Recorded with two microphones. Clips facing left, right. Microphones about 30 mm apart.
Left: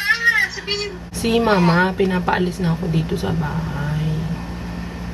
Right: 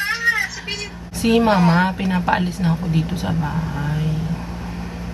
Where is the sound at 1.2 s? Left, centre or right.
Centre.